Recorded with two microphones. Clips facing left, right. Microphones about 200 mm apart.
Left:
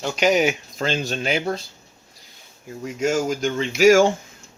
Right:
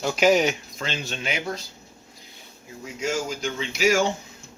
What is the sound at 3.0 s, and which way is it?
Speech, 50° left (ahead or behind).